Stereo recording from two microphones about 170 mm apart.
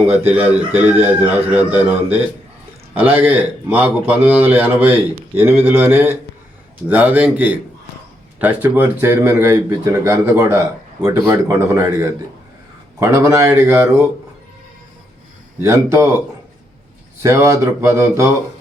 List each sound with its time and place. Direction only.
0.0 s speech: 10° right (ahead or behind)
15.6 s speech: 15° right (ahead or behind)
17.2 s speech: 15° right (ahead or behind)